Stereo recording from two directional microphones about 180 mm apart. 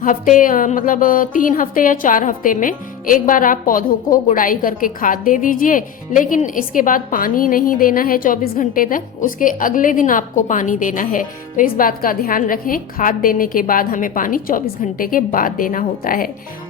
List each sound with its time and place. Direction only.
0.0 s a woman's voice: 45° left (ahead or behind)